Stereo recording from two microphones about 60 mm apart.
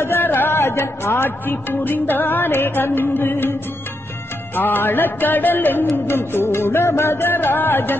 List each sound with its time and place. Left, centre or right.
0.0 s speech: left
4.6 s speech: left